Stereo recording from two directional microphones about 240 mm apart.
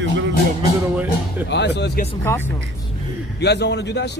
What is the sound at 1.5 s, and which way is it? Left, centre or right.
Speech, left.